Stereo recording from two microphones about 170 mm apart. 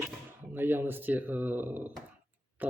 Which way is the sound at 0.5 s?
10° right (ahead or behind).